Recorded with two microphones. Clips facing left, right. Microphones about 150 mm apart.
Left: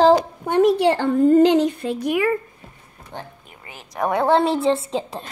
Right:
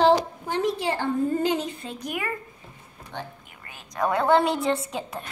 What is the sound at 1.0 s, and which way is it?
Speech, 90° left.